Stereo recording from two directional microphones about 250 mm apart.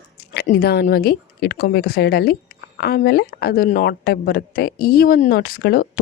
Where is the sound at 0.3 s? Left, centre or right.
Left.